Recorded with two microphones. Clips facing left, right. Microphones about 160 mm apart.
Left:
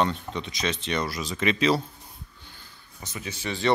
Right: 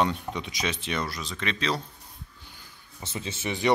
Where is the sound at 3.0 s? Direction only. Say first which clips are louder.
Right 1 dB; 25° right (ahead or behind).